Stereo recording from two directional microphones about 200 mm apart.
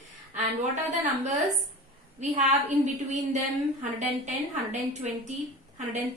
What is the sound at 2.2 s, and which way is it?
A woman's voice, 35° right (ahead or behind).